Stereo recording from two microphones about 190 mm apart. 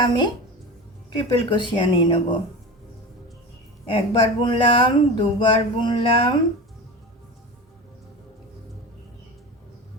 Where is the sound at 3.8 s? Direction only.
25° left (ahead or behind).